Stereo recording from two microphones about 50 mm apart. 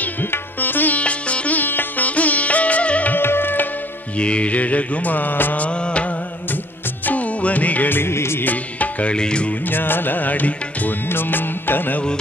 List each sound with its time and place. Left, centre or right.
0.0 s sitar: left
2.0 s music: left
3.2 s music: left
4.2 s mantra: left
5.7 s music: left
8.0 s music: left
8.5 s music: left
9.1 s mantra: centre
9.7 s music: left